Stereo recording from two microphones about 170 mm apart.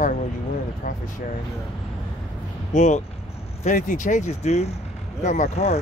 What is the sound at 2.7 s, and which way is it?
Speech, 45° left (ahead or behind).